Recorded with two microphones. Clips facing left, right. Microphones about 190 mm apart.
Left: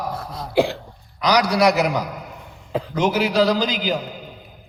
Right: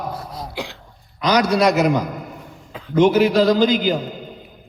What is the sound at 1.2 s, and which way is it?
Speech, 20° right (ahead or behind).